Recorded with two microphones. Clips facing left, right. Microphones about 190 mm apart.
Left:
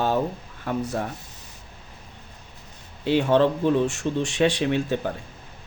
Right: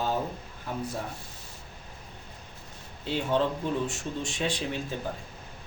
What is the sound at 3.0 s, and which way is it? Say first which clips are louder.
Speech: left 8 dB; 70° left (ahead or behind).